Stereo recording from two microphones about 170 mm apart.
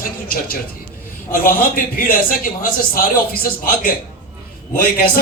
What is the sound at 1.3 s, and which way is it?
A man's voice, 55° left (ahead or behind).